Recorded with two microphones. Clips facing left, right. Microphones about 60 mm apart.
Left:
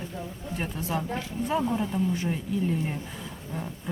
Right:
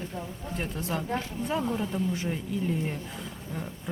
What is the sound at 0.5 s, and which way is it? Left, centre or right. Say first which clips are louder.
Speech: left 2 dB; centre.